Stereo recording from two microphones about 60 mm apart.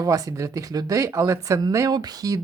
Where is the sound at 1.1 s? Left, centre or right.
Right.